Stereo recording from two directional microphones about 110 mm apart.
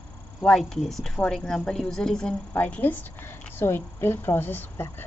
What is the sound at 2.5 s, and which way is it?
A woman's voice, 15° left (ahead or behind).